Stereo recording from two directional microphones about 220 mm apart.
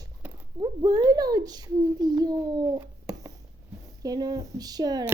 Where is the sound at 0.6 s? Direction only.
20° right (ahead or behind).